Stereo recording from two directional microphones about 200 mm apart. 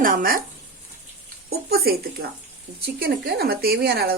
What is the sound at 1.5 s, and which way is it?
Speech, 50° right (ahead or behind).